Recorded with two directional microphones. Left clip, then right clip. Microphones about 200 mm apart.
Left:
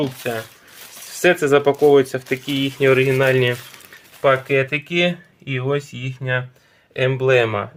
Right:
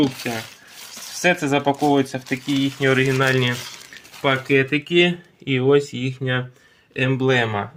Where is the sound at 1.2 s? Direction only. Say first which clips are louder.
Left 4 dB; 20° left (ahead or behind).